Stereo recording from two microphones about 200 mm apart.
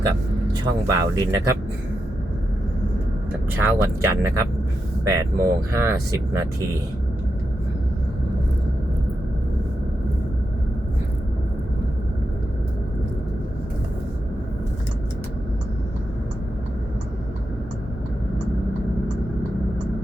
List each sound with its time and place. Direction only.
0.6 s speech: 20° right (ahead or behind)
3.5 s speech: 10° right (ahead or behind)